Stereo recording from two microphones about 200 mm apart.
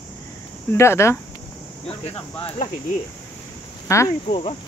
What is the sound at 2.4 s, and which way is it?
Speech, 30° left (ahead or behind).